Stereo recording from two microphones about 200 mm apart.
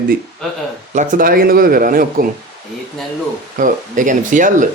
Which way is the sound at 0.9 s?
40° right (ahead or behind).